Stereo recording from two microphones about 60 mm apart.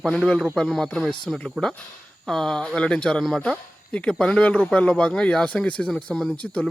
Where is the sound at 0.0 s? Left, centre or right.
Centre.